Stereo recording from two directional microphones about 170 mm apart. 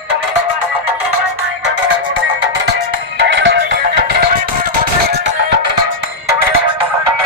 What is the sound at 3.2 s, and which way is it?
Music, 90° right.